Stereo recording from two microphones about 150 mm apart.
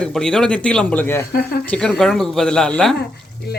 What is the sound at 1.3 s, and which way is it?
Speech, 85° left.